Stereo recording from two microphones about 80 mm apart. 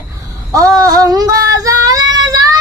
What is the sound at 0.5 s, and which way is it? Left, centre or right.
Female singing, right.